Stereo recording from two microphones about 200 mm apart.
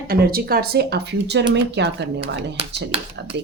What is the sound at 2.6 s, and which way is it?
Speech, 30° right (ahead or behind).